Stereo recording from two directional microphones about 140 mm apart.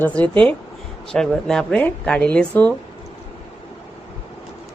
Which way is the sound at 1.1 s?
5° left (ahead or behind).